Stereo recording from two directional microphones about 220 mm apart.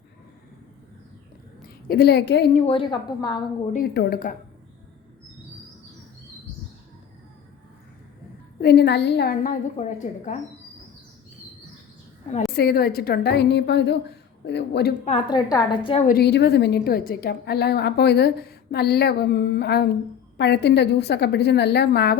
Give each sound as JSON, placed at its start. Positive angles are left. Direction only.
{"t": 1.6, "sound": "a woman's voice", "side_deg": 45}
{"t": 2.6, "sound": "a woman's voice", "side_deg": 25}
{"t": 3.9, "sound": "speech", "side_deg": 40}
{"t": 8.6, "sound": "a woman's voice", "side_deg": 50}
{"t": 12.5, "sound": "a woman's voice", "side_deg": 45}
{"t": 15.0, "sound": "a woman's voice", "side_deg": 30}
{"t": 16.0, "sound": "a woman's voice", "side_deg": 45}